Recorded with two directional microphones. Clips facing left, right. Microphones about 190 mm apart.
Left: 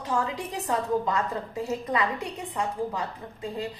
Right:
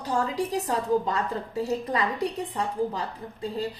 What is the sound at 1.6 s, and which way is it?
A woman's voice, 35° right (ahead or behind).